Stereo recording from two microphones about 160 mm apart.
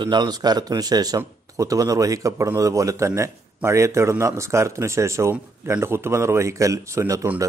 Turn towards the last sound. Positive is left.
turn(degrees=-20)  # may be behind; listen again after turning